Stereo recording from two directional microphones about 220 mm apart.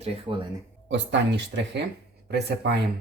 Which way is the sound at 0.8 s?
55° right (ahead or behind).